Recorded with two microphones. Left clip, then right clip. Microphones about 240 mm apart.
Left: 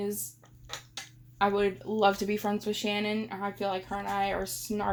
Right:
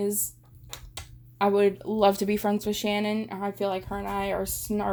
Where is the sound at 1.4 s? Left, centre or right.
Right.